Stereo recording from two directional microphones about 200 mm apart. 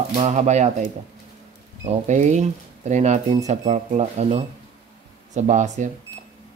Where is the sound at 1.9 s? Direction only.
35° right (ahead or behind).